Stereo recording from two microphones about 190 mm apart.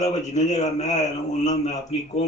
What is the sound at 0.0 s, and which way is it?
A man's voice, 40° left (ahead or behind).